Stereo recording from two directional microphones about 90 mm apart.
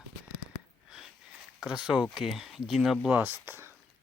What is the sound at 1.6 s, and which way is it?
Speech, 10° right (ahead or behind).